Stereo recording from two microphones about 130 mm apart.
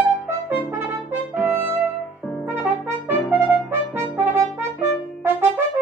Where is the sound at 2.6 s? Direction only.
15° right (ahead or behind).